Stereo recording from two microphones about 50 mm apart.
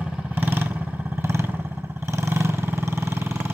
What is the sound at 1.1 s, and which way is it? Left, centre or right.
Vehicle, right.